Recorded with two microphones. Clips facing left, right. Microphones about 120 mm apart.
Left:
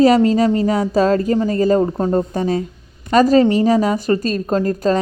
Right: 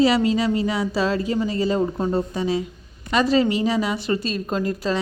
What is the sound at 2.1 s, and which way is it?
A woman's voice, 50° left (ahead or behind).